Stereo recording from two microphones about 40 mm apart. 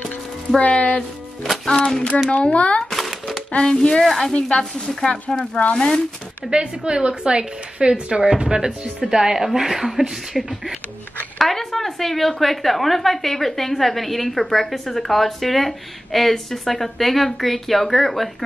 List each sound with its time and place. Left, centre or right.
0.6 s speech: left
1.7 s speech: centre
2.3 s a woman's voice: left
2.9 s a sound: centre
3.6 s a woman's voice: centre
4.0 s a woman's voice: centre
4.3 s a woman's voice: left
6.5 s a woman's voice: right; by 18.3 s centre